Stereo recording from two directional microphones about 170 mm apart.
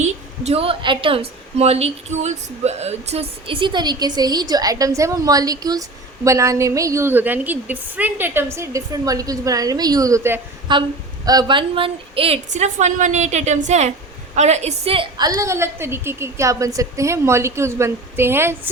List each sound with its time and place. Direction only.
0.0 s a woman's voice: 40° right (ahead or behind); by 10.4 s 15° right (ahead or behind)
10.7 s a woman's voice: 25° right (ahead or behind)
15.4 s a woman's voice: 15° right (ahead or behind)